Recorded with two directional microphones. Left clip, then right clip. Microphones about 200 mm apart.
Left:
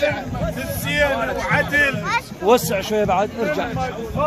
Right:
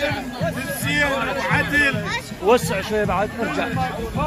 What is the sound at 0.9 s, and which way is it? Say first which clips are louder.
Speech: left 2 dB; 50° left (ahead or behind).